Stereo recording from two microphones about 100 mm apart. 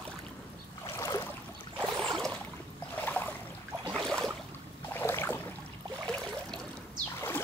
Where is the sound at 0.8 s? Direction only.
30° left (ahead or behind).